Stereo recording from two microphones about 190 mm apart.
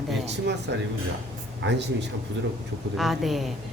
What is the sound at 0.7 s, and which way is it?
Speech, 65° right (ahead or behind).